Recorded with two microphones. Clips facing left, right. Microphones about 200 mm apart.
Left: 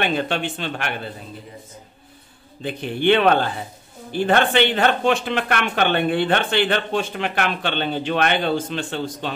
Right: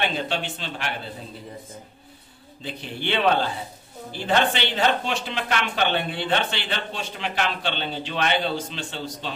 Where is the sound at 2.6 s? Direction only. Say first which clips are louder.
Left 10 dB; 55° left (ahead or behind).